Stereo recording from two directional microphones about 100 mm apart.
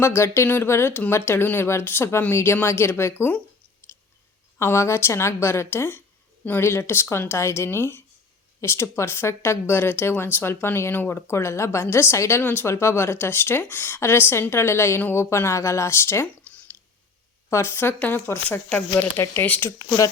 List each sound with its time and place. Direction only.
0.0 s speech: 25° left (ahead or behind)
3.8 s chewing: 25° left (ahead or behind)
4.5 s speech: 25° left (ahead or behind)
17.5 s speech: 25° left (ahead or behind)